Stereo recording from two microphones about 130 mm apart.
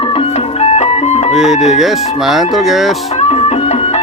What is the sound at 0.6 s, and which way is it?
Music, 60° left (ahead or behind).